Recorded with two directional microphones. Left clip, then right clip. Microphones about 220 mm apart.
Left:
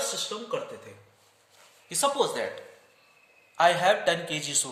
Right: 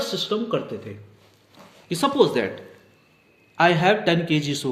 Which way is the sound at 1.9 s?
25° left (ahead or behind).